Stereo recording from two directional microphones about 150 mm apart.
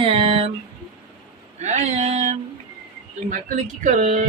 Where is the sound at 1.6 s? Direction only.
50° right (ahead or behind).